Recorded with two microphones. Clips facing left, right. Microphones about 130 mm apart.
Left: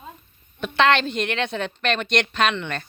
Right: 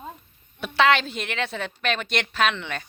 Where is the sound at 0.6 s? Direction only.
5° right (ahead or behind).